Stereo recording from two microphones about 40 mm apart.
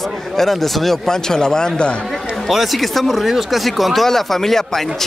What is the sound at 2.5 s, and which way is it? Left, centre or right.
Speech, centre.